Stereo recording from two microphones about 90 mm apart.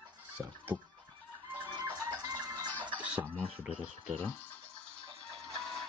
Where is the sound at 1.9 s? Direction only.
45° right (ahead or behind).